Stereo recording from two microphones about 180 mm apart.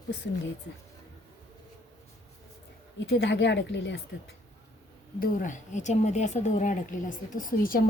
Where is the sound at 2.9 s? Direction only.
75° left (ahead or behind).